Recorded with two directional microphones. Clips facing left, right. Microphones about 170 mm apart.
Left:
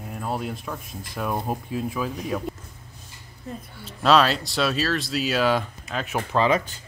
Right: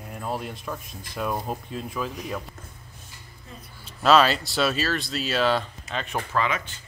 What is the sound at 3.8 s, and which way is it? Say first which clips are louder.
Speech: even; centre (ahead or behind).